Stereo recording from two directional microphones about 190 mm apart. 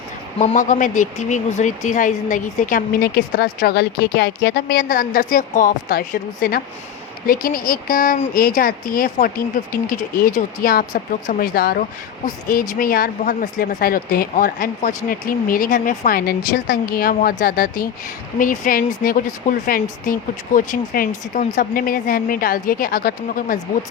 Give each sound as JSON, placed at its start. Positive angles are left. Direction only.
{"t": 0.3, "sound": "speech", "side_deg": 40}